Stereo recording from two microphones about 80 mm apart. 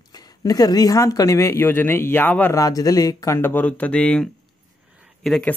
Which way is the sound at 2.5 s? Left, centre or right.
Left.